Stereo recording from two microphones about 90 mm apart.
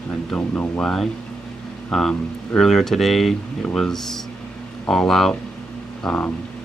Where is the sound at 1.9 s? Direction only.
5° left (ahead or behind).